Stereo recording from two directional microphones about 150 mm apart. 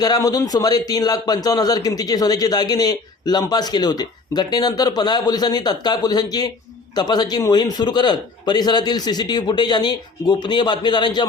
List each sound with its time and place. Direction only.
0.0 s a man's voice: 25° left (ahead or behind)